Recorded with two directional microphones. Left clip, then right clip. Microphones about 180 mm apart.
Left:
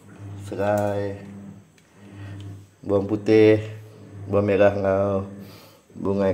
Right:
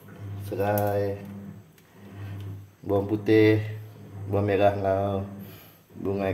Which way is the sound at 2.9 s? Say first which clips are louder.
Left 3 dB; 30° left (ahead or behind).